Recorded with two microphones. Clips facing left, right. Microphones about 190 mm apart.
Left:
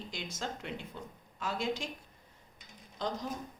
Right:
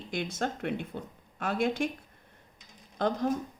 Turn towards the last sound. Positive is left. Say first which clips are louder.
# right 8 dB
turn(degrees=-55)  # may be behind; listen again after turning